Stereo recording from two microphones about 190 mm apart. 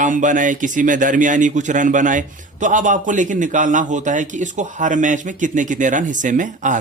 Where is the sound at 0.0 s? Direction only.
40° right (ahead or behind).